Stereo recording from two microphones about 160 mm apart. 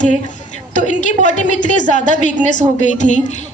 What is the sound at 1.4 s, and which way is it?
A woman's voice, 50° left (ahead or behind).